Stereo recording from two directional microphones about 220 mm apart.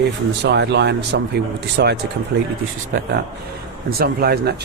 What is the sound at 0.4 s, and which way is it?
Speech, 50° right (ahead or behind).